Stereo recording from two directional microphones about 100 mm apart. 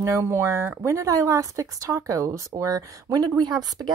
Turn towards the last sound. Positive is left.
turn(degrees=-45)  # may be behind; listen again after turning